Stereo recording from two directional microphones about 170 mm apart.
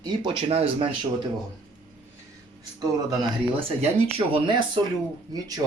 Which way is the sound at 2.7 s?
20° right (ahead or behind).